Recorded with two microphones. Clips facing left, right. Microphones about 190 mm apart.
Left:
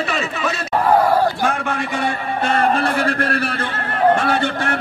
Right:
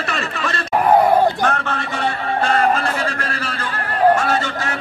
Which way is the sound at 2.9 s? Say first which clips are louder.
Left 5 dB; 60° left (ahead or behind).